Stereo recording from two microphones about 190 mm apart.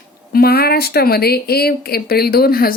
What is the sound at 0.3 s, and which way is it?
Speech, 55° left (ahead or behind).